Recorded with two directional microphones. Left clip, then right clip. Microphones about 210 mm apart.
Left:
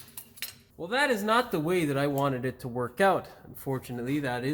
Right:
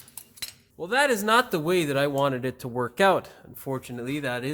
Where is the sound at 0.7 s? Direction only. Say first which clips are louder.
Right 4 dB; 50° right (ahead or behind).